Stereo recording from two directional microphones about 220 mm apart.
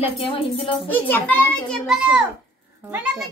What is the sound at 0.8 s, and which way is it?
A child's voice, 10° left (ahead or behind).